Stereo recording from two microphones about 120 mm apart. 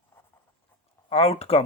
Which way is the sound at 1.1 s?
55° left (ahead or behind).